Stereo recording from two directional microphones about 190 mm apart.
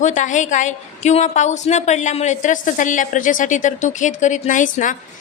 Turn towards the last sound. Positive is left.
turn(degrees=40)  # may be behind; listen again after turning